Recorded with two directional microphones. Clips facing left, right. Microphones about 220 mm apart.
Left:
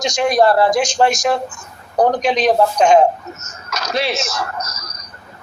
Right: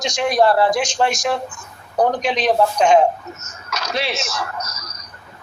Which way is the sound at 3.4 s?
40° left (ahead or behind).